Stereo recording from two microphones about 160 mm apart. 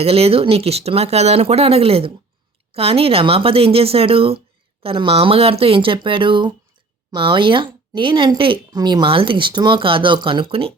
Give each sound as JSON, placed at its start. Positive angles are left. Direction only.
{"t": 0.0, "sound": "speech", "side_deg": -40}